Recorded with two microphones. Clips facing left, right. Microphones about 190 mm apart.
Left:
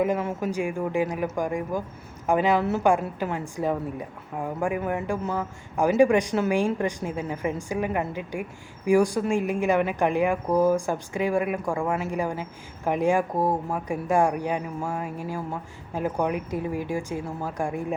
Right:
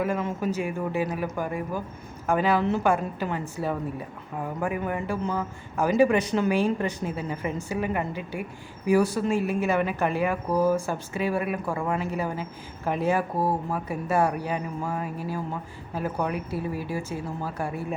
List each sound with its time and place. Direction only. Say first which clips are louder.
0.0 s a woman's voice: left 2 dB; 15° left (ahead or behind)